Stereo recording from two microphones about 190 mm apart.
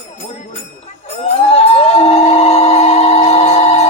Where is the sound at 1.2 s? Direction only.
30° left (ahead or behind).